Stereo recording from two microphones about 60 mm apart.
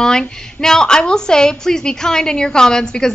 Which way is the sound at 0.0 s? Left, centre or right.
Centre.